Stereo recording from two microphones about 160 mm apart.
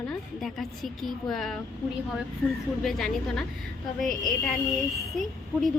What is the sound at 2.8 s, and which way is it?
A woman's voice, centre (ahead or behind).